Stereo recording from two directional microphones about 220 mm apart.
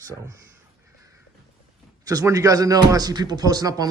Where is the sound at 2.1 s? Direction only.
15° right (ahead or behind).